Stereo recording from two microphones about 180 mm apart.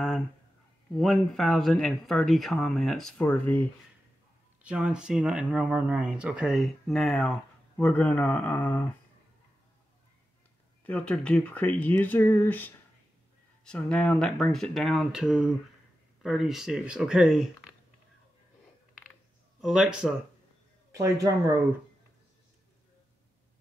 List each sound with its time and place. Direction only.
0.9 s speech: centre (ahead or behind)
4.6 s speech: 5° right (ahead or behind)
10.9 s speech: 5° left (ahead or behind)
19.6 s speech: 5° right (ahead or behind)
20.9 s speech: 20° right (ahead or behind)